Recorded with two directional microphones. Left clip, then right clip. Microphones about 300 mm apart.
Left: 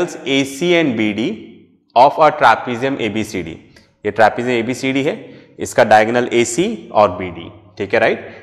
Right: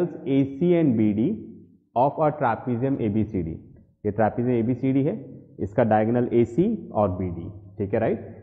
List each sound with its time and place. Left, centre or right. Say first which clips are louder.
0.0 s a man's voice: left 7 dB; centre